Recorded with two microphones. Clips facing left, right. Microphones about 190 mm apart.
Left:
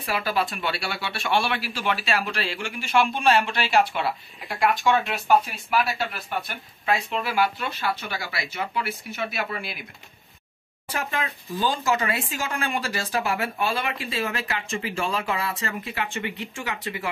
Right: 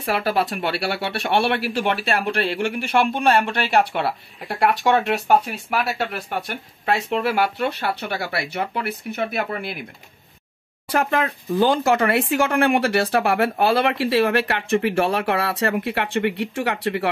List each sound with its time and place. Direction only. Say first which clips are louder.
0.0 s speech: right 4 dB; 65° right (ahead or behind); by 9.8 s 50° right (ahead or behind)
10.9 s speech: right 8 dB; 65° right (ahead or behind)